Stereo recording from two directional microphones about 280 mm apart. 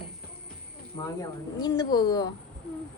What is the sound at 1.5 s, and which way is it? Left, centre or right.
Speech, centre.